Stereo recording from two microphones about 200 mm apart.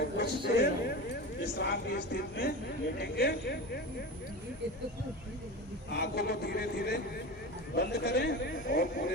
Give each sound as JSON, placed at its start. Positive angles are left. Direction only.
{"t": 0.2, "sound": "speech", "side_deg": 55}
{"t": 5.9, "sound": "speech", "side_deg": 55}